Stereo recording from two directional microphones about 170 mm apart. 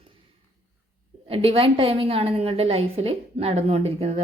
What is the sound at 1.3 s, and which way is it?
A woman's voice, 35° right (ahead or behind).